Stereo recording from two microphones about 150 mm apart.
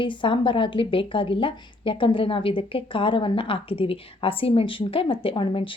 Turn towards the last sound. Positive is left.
turn(degrees=35)  # may be behind; listen again after turning